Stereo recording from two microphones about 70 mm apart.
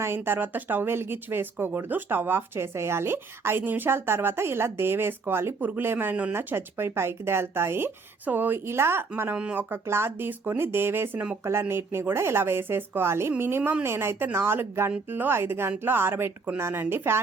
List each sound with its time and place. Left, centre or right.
0.0 s speech: right
6.3 s speech: right